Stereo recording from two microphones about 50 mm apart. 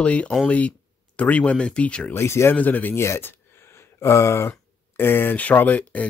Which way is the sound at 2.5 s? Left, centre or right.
Left.